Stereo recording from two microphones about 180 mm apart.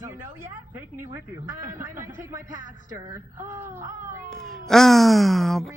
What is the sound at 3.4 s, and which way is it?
Wail, 15° right (ahead or behind).